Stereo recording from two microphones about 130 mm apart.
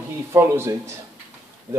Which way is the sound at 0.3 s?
20° right (ahead or behind).